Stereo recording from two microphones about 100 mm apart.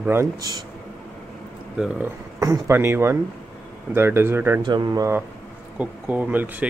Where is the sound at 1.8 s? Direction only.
10° right (ahead or behind).